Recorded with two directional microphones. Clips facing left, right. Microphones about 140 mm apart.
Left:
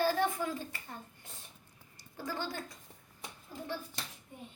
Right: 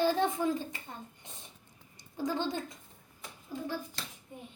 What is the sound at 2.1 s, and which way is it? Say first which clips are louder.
Speech: right 6 dB; 20° right (ahead or behind).